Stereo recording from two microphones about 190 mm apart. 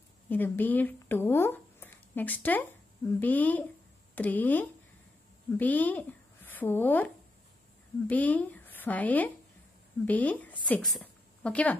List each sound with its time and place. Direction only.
0.3 s speech: 10° left (ahead or behind)
8.1 s a woman's voice: 10° left (ahead or behind)